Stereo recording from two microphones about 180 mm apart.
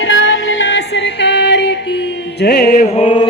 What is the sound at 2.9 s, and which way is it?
Mantra, 30° left (ahead or behind).